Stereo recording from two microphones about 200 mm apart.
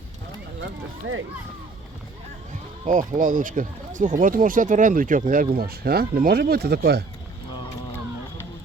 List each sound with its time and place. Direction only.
0.6 s speech: 75° right (ahead or behind)
2.8 s speech: 40° right (ahead or behind); by 7.0 s 55° right (ahead or behind)